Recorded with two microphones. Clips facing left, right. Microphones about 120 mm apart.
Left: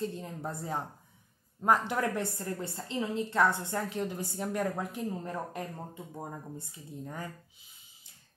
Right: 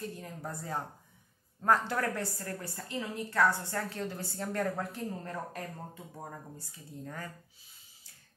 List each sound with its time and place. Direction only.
0.0 s a woman's voice: 25° left (ahead or behind)